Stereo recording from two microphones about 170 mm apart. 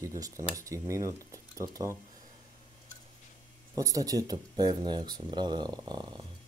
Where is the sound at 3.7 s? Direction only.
20° right (ahead or behind).